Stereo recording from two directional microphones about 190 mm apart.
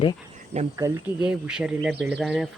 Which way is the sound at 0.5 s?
35° right (ahead or behind).